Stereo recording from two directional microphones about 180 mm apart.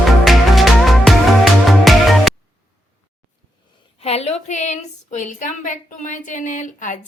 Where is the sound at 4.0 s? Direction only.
35° left (ahead or behind).